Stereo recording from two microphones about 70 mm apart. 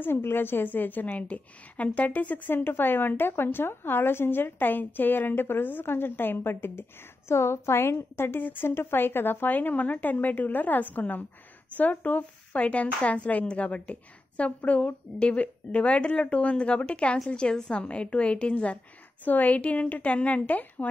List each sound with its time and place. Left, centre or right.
0.0 s a woman's voice: left